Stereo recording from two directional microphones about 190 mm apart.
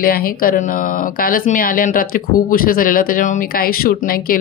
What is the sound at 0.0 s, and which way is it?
Speech, 50° left (ahead or behind).